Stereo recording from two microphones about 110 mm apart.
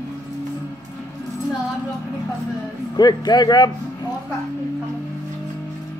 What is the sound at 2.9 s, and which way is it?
Speech, 40° left (ahead or behind).